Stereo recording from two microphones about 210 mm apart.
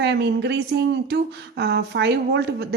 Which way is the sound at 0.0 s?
50° right (ahead or behind).